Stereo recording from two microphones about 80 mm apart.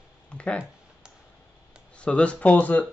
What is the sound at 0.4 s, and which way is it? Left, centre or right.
Speech, centre.